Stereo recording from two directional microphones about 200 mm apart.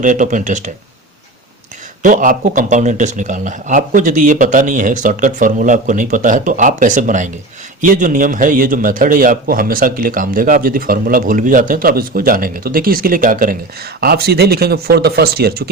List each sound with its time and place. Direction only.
0.0 s speech: 40° right (ahead or behind)
2.0 s a man's voice: 40° right (ahead or behind)